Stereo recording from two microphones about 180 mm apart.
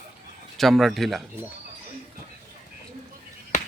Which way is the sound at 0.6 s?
Centre (ahead or behind).